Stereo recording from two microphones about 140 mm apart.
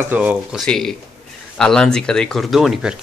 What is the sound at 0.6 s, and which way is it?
Speech, 5° left (ahead or behind).